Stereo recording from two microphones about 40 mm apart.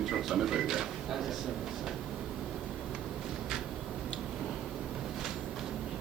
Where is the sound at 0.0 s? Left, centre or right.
Centre.